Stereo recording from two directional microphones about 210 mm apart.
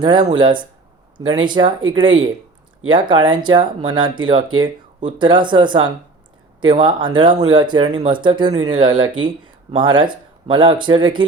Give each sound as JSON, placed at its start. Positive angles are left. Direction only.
{"t": 0.0, "sound": "speech", "side_deg": -20}